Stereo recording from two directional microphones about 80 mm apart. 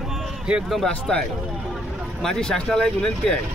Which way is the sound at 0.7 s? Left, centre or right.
Centre.